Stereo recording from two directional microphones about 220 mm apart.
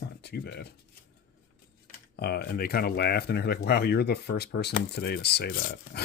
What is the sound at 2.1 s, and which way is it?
Speech, 45° left (ahead or behind).